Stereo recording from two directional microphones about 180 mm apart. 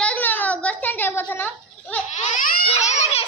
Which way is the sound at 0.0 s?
10° left (ahead or behind).